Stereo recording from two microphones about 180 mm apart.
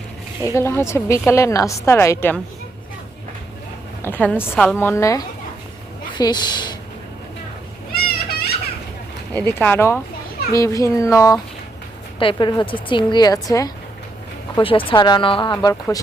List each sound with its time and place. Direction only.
0.4 s a woman's voice: 15° left (ahead or behind)
4.0 s a woman's voice: 10° left (ahead or behind)
4.8 s a woman's voice: 15° left (ahead or behind)
7.9 s goat: 55° left (ahead or behind)
9.4 s a woman's voice: 10° left (ahead or behind)
12.2 s a woman's voice: 25° left (ahead or behind)
14.5 s a woman's voice: 30° left (ahead or behind)